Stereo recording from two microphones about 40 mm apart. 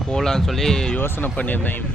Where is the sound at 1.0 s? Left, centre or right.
Left.